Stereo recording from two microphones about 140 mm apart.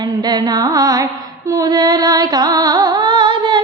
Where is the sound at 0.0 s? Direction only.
30° right (ahead or behind).